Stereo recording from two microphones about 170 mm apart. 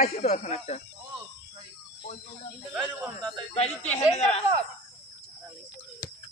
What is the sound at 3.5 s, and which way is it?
Speech, 40° left (ahead or behind).